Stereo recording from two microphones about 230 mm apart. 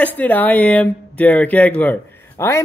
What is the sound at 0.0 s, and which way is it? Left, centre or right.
Speech, centre.